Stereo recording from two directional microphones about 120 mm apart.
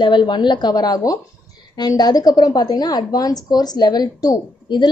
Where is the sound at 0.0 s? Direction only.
40° left (ahead or behind).